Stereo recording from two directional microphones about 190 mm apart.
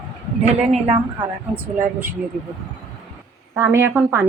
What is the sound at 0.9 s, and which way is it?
Speech, 25° right (ahead or behind).